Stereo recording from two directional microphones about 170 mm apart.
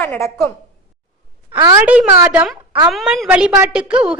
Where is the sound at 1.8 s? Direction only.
10° right (ahead or behind).